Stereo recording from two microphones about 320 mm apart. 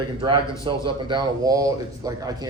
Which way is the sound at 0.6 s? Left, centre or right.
Centre.